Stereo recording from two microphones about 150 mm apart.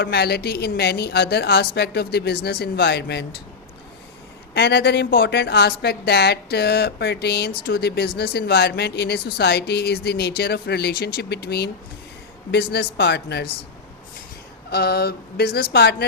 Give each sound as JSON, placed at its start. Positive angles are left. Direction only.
{"t": 0.1, "sound": "a woman's voice", "side_deg": 90}
{"t": 4.5, "sound": "a woman's voice", "side_deg": 90}
{"t": 14.7, "sound": "a woman's voice", "side_deg": 90}